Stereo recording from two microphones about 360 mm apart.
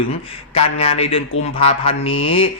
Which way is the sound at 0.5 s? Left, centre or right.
Centre.